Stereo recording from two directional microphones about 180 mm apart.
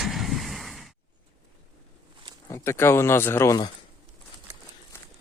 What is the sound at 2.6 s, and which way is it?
Speech, 15° left (ahead or behind).